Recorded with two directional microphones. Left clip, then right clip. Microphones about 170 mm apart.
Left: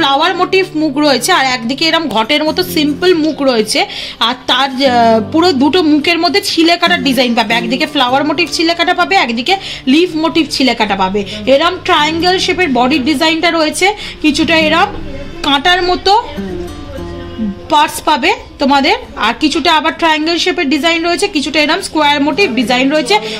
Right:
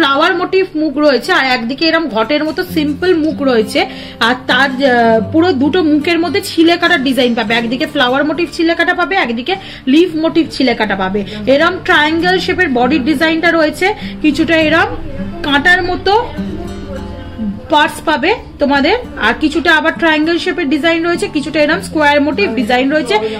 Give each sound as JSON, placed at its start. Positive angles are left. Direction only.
{"t": 0.0, "sound": "a woman's voice", "side_deg": 55}
{"t": 17.6, "sound": "a woman's voice", "side_deg": 50}